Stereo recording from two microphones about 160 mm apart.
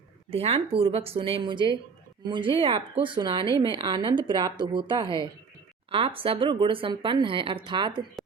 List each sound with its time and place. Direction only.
0.3 s speech: 40° right (ahead or behind)